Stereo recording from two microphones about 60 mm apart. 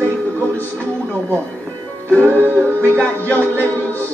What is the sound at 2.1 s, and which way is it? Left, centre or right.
Music, left.